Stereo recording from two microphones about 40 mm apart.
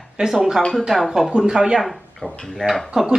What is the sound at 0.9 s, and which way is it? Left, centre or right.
Speech, centre.